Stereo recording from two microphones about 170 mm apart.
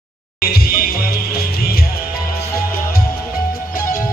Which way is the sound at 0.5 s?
65° left (ahead or behind).